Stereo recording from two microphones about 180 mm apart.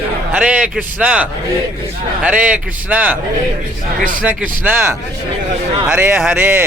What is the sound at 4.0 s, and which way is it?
Speech, 50° right (ahead or behind).